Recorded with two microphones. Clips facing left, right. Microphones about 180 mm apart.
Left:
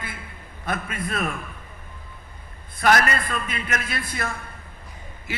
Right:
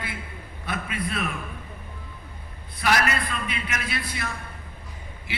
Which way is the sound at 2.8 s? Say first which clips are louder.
Left 4 dB; 50° left (ahead or behind).